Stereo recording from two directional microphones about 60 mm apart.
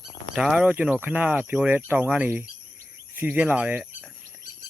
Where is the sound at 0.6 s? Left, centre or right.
Right.